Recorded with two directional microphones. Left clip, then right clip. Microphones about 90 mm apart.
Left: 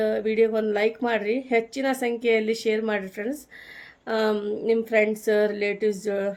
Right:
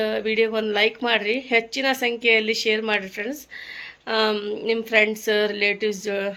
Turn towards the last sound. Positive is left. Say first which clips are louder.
# even
turn(degrees=40)  # may be behind; listen again after turning